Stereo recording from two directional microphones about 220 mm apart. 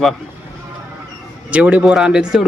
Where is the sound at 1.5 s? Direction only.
5° right (ahead or behind).